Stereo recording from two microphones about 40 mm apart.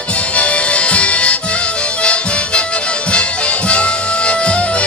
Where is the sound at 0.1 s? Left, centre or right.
Left.